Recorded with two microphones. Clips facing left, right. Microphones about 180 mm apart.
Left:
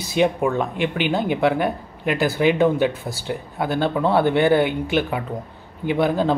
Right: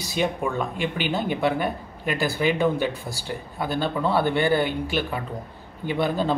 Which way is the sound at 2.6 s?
20° left (ahead or behind).